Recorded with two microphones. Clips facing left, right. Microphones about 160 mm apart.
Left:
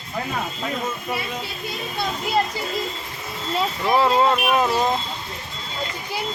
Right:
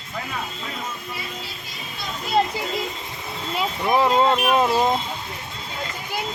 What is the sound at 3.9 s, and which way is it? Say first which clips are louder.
Speech: even; 15° right (ahead or behind).